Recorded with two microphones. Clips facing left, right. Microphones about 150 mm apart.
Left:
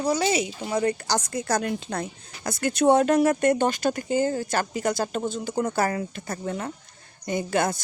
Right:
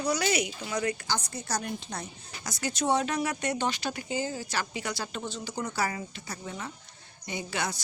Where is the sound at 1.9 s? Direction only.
55° left (ahead or behind).